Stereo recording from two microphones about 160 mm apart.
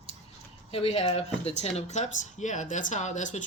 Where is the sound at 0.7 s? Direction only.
40° left (ahead or behind).